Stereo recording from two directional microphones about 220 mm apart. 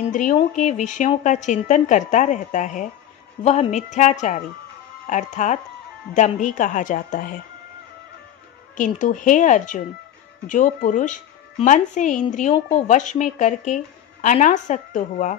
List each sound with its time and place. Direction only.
0.1 s a woman's voice: 35° left (ahead or behind)
8.7 s a woman's voice: 35° left (ahead or behind)